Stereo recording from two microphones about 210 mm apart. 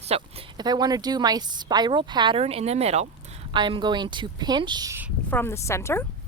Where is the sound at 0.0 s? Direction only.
30° right (ahead or behind); by 5.1 s 10° right (ahead or behind).